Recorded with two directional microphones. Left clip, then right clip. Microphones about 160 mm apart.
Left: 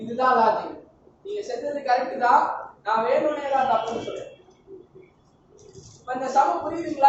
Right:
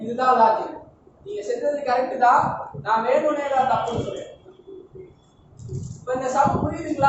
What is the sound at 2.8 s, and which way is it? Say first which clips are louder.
Speech: right 2 dB; 20° right (ahead or behind).